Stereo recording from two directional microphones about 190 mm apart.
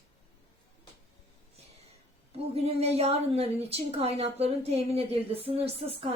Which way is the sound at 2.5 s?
35° right (ahead or behind).